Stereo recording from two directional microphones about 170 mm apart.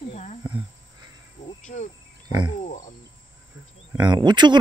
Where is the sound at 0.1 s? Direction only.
45° left (ahead or behind).